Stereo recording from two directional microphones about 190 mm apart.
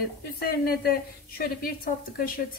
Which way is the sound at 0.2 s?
55° left (ahead or behind).